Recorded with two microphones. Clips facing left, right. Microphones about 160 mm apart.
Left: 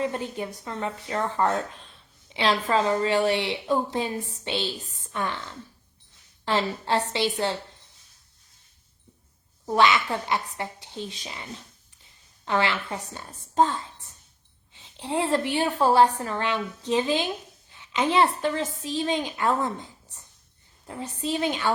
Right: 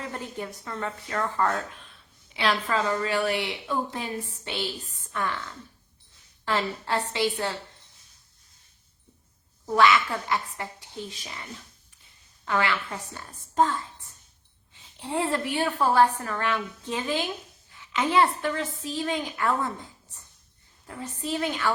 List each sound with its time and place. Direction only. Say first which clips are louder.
0.0 s a woman's voice: left 6 dB; 20° left (ahead or behind)
9.7 s a woman's voice: even; 25° left (ahead or behind)
12.5 s a woman's voice: left 1 dB; 25° left (ahead or behind)